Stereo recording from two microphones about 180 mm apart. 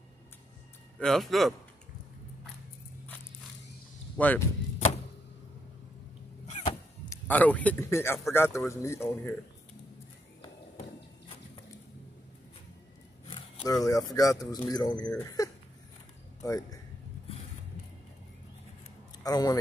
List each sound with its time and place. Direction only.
0.9 s a man's voice: centre (ahead or behind)
4.2 s speech: 10° left (ahead or behind)
6.4 s a sound: 35° left (ahead or behind)
7.1 s speech: 10° left (ahead or behind)
13.3 s a man's voice: 20° left (ahead or behind)
19.2 s speech: 20° left (ahead or behind)